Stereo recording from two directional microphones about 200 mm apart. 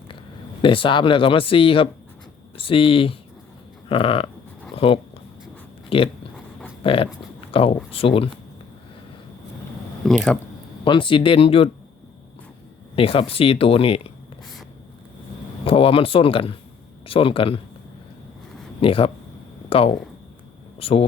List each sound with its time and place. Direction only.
0.6 s speech: 25° left (ahead or behind)
4.7 s a sound: 25° left (ahead or behind)
5.9 s speech: 25° left (ahead or behind)
10.1 s speech: centre (ahead or behind)
10.8 s speech: 25° left (ahead or behind)
13.0 s speech: 25° left (ahead or behind)
15.6 s speech: 25° left (ahead or behind)
18.8 s speech: 25° left (ahead or behind)